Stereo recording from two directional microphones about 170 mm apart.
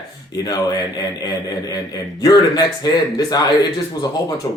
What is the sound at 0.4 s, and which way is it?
Speech, 25° left (ahead or behind).